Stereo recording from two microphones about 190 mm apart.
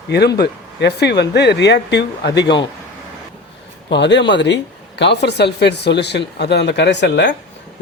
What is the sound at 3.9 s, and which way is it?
Speech, 65° left (ahead or behind).